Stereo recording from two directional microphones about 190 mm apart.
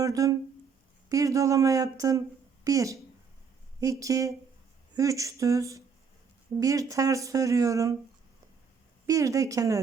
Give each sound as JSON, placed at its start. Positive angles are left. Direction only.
{"t": 0.0, "sound": "speech", "side_deg": -15}
{"t": 9.0, "sound": "speech", "side_deg": -15}